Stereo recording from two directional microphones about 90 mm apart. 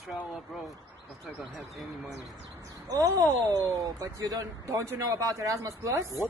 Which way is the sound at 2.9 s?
40° right (ahead or behind).